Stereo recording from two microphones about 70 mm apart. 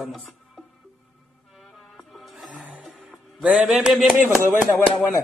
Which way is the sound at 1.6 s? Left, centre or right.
Centre.